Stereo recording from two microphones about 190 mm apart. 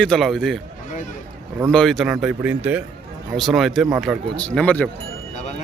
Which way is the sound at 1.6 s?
Centre (ahead or behind).